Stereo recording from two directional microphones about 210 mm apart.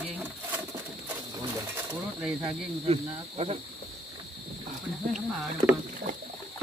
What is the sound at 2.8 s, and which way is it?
Speech, 30° right (ahead or behind).